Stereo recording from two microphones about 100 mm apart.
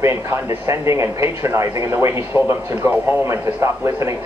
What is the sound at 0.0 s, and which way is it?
Speech, 30° right (ahead or behind).